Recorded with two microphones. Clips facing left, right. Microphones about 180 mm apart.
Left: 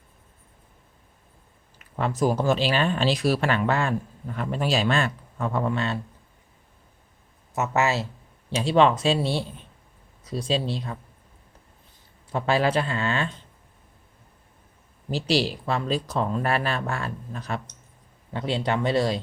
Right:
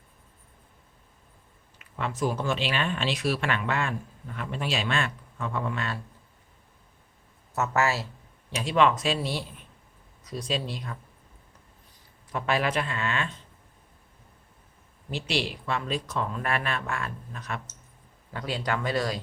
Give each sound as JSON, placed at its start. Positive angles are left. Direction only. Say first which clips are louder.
{"t": 1.8, "sound": "speech", "louder": "left 5 dB", "side_deg": 40}
{"t": 7.5, "sound": "speech", "louder": "left 2 dB", "side_deg": 20}
{"t": 12.3, "sound": "speech", "louder": "left 4 dB", "side_deg": 30}
{"t": 15.1, "sound": "speech", "louder": "left 6 dB", "side_deg": 35}